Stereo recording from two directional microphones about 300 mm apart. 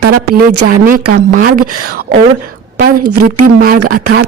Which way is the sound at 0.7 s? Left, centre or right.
Right.